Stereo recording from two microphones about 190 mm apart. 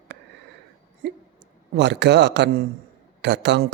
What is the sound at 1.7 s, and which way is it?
Speech, 65° right (ahead or behind).